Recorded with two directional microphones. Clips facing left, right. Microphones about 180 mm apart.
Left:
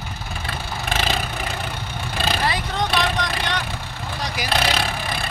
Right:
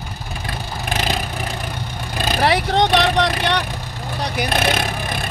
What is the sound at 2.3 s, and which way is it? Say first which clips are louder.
Vehicle: right 11 dB; 75° right (ahead or behind).